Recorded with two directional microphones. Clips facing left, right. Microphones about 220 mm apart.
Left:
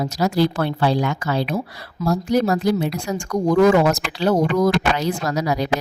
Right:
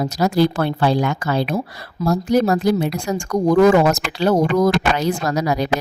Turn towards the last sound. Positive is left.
turn(degrees=-50)  # may be behind; listen again after turning